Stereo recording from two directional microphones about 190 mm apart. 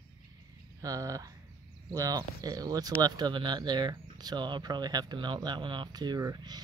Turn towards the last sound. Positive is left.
turn(degrees=-20)  # may be behind; listen again after turning